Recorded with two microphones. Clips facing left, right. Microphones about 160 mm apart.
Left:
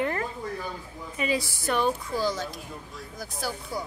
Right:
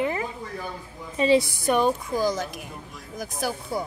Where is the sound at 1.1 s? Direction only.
30° right (ahead or behind).